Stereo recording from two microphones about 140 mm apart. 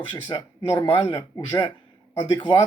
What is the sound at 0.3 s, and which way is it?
Speech, 30° left (ahead or behind).